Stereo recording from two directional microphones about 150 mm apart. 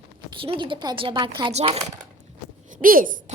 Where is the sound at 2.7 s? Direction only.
70° right (ahead or behind).